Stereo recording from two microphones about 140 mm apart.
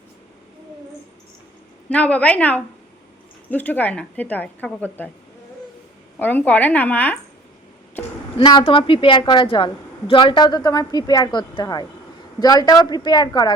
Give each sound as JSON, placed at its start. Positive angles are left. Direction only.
{"t": 1.9, "sound": "a woman's voice", "side_deg": 10}
{"t": 6.1, "sound": "a woman's voice", "side_deg": 10}
{"t": 8.4, "sound": "a woman's voice", "side_deg": 35}